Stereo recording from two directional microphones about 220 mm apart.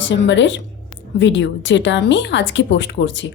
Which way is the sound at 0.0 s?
55° left (ahead or behind).